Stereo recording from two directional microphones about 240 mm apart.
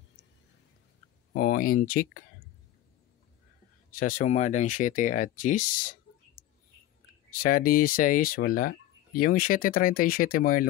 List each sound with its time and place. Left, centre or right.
1.3 s speech: left
4.0 s speech: left